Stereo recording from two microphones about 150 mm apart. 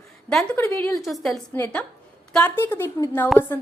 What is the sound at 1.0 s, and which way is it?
Speech, centre (ahead or behind).